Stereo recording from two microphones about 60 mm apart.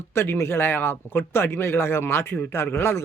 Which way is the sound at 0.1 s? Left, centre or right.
Left.